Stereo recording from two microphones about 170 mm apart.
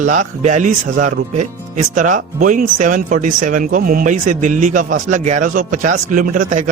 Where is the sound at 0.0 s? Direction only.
45° right (ahead or behind).